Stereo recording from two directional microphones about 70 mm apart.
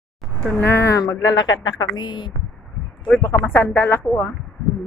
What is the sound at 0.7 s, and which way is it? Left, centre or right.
A woman's voice, left.